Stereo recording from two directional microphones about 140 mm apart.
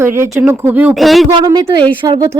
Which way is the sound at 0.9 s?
Centre (ahead or behind).